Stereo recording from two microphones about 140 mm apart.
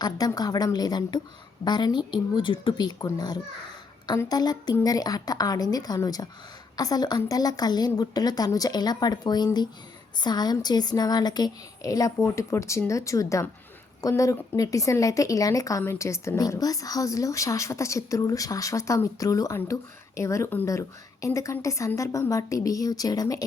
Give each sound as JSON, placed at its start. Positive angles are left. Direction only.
{"t": 0.0, "sound": "a woman's voice", "side_deg": 30}